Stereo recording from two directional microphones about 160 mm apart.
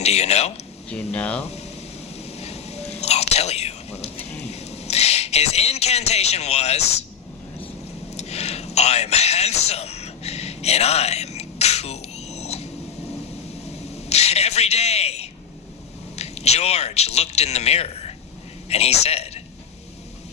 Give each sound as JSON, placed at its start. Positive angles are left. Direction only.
{"t": 0.0, "sound": "speech", "side_deg": 40}
{"t": 0.9, "sound": "speech", "side_deg": 5}
{"t": 1.4, "sound": "speech", "side_deg": 40}
{"t": 2.1, "sound": "whispering", "side_deg": 40}
{"t": 8.1, "sound": "a sound", "side_deg": 40}
{"t": 13.9, "sound": "a sound", "side_deg": 40}
{"t": 16.1, "sound": "a man's voice", "side_deg": 40}